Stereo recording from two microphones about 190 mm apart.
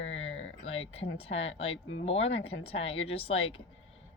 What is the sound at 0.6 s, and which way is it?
Speech, 30° left (ahead or behind).